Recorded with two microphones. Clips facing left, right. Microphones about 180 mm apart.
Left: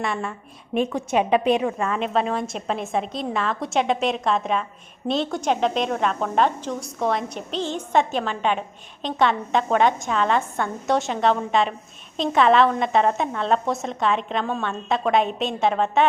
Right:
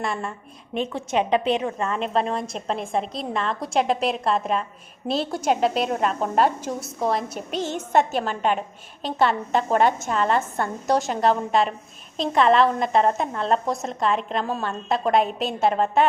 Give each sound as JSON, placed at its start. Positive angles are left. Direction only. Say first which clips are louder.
{"t": 0.0, "sound": "a woman's voice", "louder": "left 1 dB", "side_deg": 0}
{"t": 0.8, "sound": "a woman's voice", "louder": "left 2 dB", "side_deg": 10}
{"t": 8.2, "sound": "a woman's voice", "louder": "even", "side_deg": -45}
{"t": 8.5, "sound": "a woman's voice", "louder": "even", "side_deg": -5}